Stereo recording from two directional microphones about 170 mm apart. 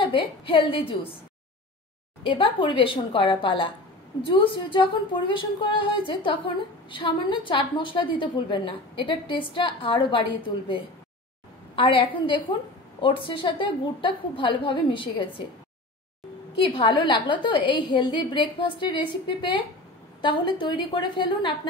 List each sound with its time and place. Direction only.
0.0 s a woman's voice: 30° left (ahead or behind)
2.2 s a woman's voice: 30° left (ahead or behind)
16.6 s a woman's voice: 30° left (ahead or behind)